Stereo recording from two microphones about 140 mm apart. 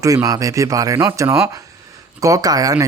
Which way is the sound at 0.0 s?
25° right (ahead or behind).